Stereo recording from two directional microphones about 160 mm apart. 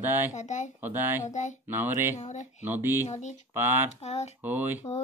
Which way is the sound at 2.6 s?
15° right (ahead or behind).